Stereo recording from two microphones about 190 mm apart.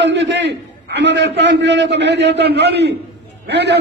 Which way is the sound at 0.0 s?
70° right (ahead or behind).